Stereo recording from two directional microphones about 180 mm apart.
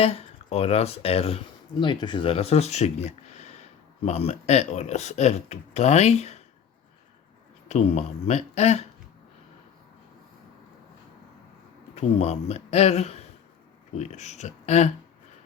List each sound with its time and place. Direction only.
0.0 s speech: 35° left (ahead or behind)
7.7 s speech: 40° left (ahead or behind)
11.9 s speech: 35° left (ahead or behind)